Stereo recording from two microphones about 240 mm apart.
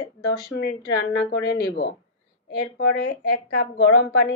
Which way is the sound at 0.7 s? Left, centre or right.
Left.